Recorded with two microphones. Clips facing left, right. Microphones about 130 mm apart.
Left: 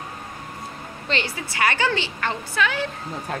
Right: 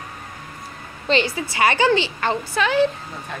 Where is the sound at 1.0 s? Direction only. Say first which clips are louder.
Right 7 dB; 20° right (ahead or behind).